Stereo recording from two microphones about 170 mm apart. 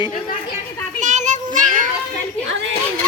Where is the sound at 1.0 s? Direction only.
45° right (ahead or behind).